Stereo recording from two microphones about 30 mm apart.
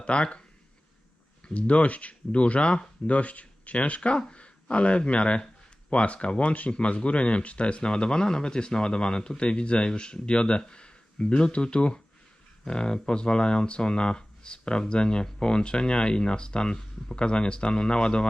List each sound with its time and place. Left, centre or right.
0.0 s speech: left
1.5 s speech: left
3.1 s speech: left